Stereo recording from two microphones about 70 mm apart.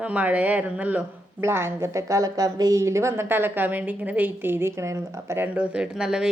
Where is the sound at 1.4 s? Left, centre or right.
Right.